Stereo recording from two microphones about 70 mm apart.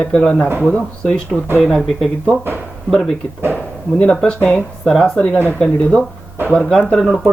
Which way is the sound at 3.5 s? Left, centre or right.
Centre.